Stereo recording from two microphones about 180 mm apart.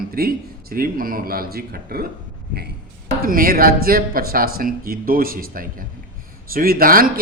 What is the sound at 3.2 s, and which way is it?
Speech, 55° right (ahead or behind).